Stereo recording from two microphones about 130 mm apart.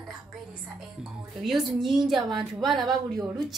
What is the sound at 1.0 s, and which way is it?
A woman's voice, 5° right (ahead or behind).